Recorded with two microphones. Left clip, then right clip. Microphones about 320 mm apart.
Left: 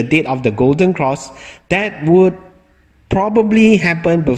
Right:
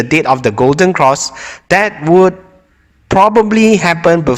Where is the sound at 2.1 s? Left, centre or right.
Right.